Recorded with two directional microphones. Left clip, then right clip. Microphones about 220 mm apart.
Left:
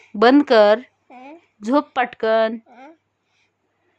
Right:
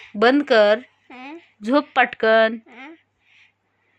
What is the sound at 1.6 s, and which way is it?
Speech, 15° left (ahead or behind).